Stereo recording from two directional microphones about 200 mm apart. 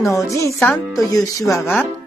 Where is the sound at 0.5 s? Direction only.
Centre (ahead or behind).